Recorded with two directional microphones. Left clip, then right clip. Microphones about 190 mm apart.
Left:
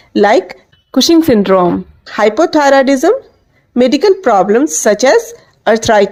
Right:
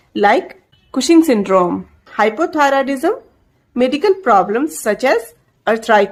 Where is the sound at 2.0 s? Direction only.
35° left (ahead or behind).